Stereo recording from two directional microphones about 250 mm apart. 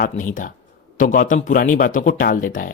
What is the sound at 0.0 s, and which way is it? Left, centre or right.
Speech, left.